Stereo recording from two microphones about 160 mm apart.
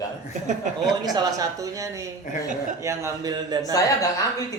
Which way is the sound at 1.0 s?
25° right (ahead or behind).